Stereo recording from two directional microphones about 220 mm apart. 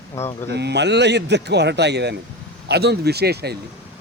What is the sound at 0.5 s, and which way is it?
Speech, 50° right (ahead or behind).